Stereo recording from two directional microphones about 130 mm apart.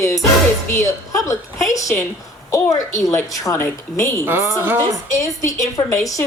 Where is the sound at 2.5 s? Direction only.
25° left (ahead or behind).